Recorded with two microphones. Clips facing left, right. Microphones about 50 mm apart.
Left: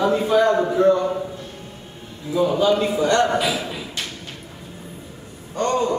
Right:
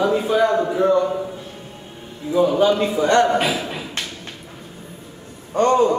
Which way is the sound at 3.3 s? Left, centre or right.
Right.